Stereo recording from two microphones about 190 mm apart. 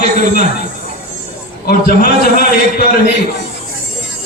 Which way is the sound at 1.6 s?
50° left (ahead or behind).